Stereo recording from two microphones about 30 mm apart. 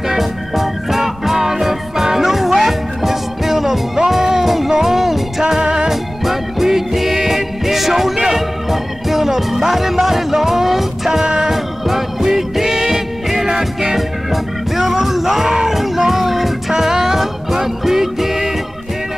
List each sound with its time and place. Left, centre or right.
0.1 s music: centre
5.6 s music: right
5.9 s music: centre